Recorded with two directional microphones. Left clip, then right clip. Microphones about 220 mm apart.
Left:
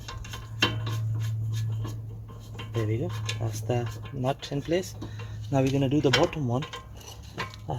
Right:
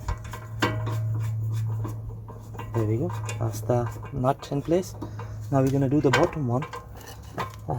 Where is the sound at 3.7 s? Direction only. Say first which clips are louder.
Right 5 dB; 30° right (ahead or behind).